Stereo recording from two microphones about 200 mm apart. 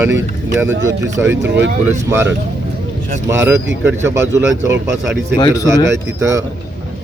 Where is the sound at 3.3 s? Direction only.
10° right (ahead or behind).